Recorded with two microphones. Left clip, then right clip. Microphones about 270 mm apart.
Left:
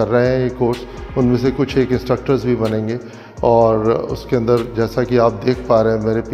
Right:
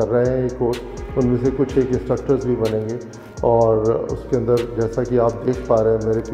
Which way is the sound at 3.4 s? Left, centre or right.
Left.